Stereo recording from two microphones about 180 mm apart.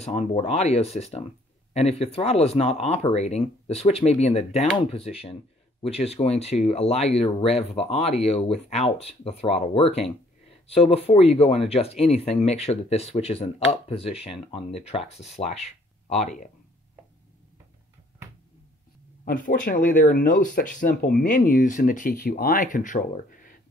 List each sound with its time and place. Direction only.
0.0 s speech: 35° left (ahead or behind)
19.2 s speech: 45° left (ahead or behind)